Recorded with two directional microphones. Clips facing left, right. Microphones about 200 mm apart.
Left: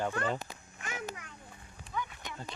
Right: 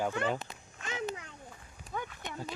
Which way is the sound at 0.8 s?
25° right (ahead or behind).